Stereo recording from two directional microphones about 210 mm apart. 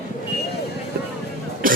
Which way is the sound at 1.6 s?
40° right (ahead or behind).